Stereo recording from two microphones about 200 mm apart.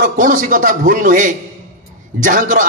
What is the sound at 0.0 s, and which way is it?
Speech, 40° right (ahead or behind).